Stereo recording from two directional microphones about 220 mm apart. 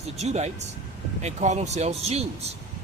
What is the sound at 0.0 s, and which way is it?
Speech, 30° right (ahead or behind).